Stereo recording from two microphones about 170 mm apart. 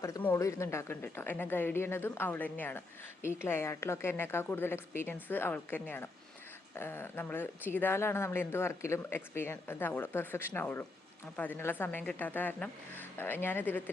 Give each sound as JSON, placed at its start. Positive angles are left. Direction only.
{"t": 0.0, "sound": "speech", "side_deg": 15}